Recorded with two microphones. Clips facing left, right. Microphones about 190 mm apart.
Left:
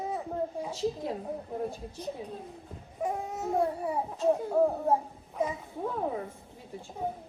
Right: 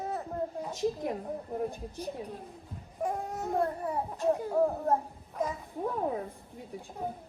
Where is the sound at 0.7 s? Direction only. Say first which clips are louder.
Right 1 dB; 15° right (ahead or behind).